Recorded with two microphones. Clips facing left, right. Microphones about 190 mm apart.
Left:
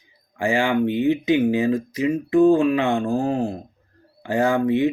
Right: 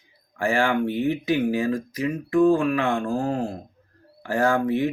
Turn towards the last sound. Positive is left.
turn(degrees=20)  # may be behind; listen again after turning